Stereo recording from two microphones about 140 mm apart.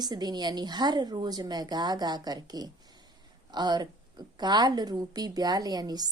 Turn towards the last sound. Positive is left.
turn(degrees=-30)  # may be behind; listen again after turning